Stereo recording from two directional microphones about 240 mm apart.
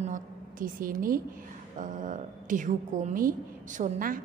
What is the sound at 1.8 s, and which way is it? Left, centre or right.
A woman's voice, right.